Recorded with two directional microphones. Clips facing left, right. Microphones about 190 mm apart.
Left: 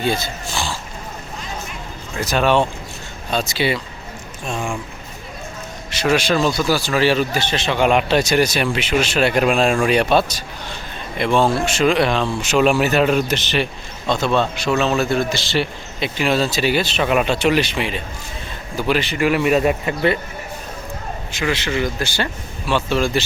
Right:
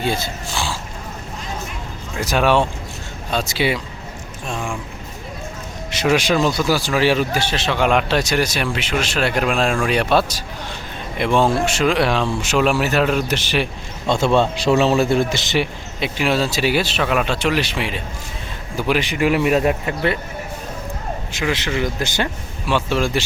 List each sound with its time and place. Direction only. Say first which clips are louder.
0.1 s speech: left 1 dB; 5° right (ahead or behind)
2.2 s speech: even; 10° right (ahead or behind)
5.9 s speech: even; 15° right (ahead or behind)
14.1 s speech: right 2 dB; 25° right (ahead or behind)
15.5 s speech: right 1 dB; 10° right (ahead or behind)
17.1 s speech: left 3 dB; 5° left (ahead or behind); by 19.2 s 15° right (ahead or behind)
19.2 s speech: even; centre (ahead or behind)
21.3 s speech: left 1 dB; 15° right (ahead or behind)
21.7 s speech: left 1 dB; centre (ahead or behind)
22.0 s speech: right 1 dB; 15° right (ahead or behind)